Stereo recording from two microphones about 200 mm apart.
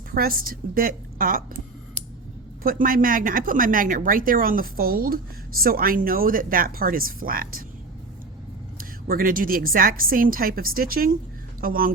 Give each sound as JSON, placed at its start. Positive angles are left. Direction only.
{"t": 0.1, "sound": "a woman's voice", "side_deg": -45}
{"t": 2.6, "sound": "a woman's voice", "side_deg": -45}
{"t": 8.8, "sound": "a woman's voice", "side_deg": -45}